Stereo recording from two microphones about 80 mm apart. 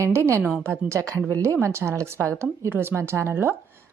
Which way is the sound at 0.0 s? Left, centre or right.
Right.